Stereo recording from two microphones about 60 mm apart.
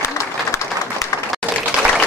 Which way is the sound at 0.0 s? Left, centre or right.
Left.